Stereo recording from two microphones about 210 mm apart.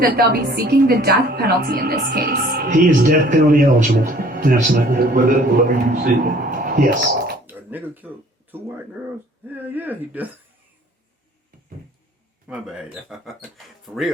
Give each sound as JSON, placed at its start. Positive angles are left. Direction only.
{"t": 0.0, "sound": "a woman's voice", "side_deg": -45}
{"t": 7.4, "sound": "speech", "side_deg": -10}
{"t": 12.5, "sound": "speech", "side_deg": -5}